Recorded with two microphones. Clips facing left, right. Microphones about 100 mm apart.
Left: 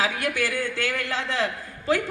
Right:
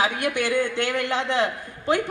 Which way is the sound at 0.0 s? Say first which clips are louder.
Right 2 dB; 20° right (ahead or behind).